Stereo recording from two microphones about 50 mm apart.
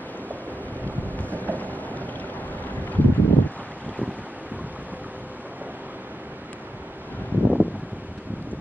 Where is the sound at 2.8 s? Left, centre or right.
Left.